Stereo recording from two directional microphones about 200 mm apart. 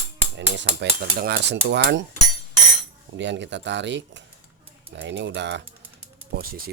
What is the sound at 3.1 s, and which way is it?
Cutlery, 65° right (ahead or behind).